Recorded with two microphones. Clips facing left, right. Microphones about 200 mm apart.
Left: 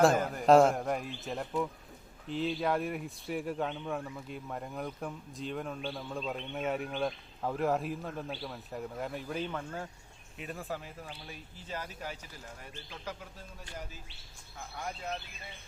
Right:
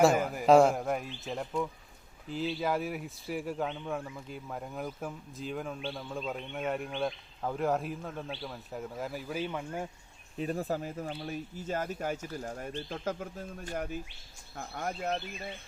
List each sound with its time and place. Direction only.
0.0 s speech: centre (ahead or behind)
10.3 s speech: 35° right (ahead or behind)